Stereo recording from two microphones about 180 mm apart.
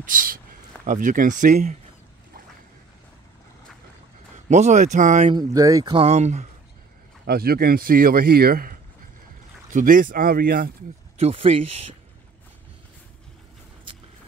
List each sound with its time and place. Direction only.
0.0 s speech: 50° right (ahead or behind)
4.5 s speech: 40° right (ahead or behind)
5.3 s speech: 20° right (ahead or behind)
5.9 s speech: 40° right (ahead or behind)
7.2 s speech: 60° right (ahead or behind)
11.1 s speech: 35° right (ahead or behind)